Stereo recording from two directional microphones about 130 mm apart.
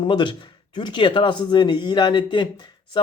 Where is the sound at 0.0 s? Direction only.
35° left (ahead or behind).